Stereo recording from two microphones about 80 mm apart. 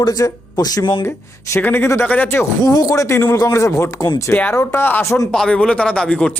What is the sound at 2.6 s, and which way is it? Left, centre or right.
Speech, left.